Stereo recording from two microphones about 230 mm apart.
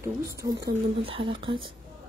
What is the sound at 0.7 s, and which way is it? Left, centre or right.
Speech, right.